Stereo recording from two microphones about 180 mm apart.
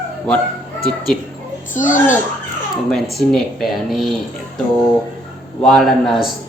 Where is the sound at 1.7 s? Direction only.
45° left (ahead or behind).